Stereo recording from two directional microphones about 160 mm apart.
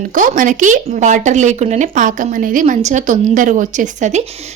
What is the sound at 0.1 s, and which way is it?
A woman's voice, 55° right (ahead or behind).